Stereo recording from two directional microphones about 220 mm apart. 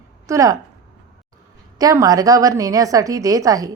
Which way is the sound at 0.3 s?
15° right (ahead or behind).